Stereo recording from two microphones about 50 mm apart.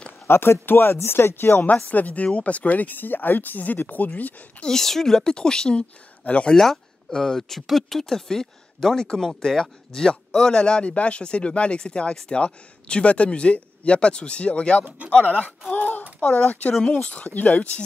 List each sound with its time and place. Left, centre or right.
0.3 s speech: left
1.9 s speech: left
4.6 s speech: centre
6.5 s speech: centre; by 16.0 s left
16.2 s speech: left
16.7 s speech: centre
17.0 s speech: left